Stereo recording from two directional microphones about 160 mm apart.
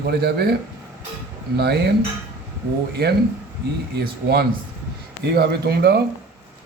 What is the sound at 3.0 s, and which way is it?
A man's voice, 75° right (ahead or behind).